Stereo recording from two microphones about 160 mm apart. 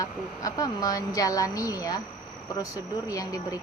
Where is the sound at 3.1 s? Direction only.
20° left (ahead or behind).